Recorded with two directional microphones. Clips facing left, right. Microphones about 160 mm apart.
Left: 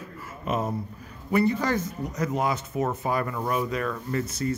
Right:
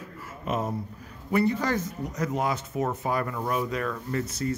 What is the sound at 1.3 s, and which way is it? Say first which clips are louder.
Speech: left 1 dB; 10° left (ahead or behind).